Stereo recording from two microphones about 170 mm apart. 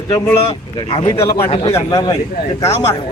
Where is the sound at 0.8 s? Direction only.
30° left (ahead or behind).